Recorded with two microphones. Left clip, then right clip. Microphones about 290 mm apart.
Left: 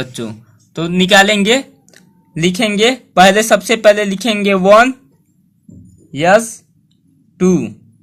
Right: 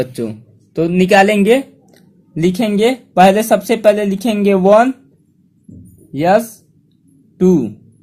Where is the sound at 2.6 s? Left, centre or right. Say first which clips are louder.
Left 3 dB; left.